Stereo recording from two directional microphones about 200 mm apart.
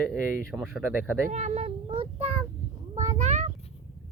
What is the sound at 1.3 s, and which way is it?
Child singing, 35° right (ahead or behind).